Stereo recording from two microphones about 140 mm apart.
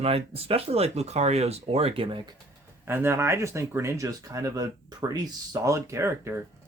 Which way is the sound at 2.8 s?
15° right (ahead or behind).